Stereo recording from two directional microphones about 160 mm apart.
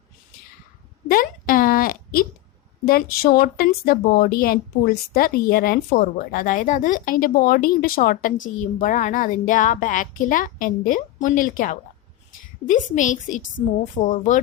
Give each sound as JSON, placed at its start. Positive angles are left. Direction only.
{"t": 1.0, "sound": "a woman's voice", "side_deg": 60}